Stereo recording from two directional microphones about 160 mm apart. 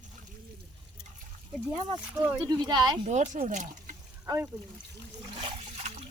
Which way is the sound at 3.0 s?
50° right (ahead or behind).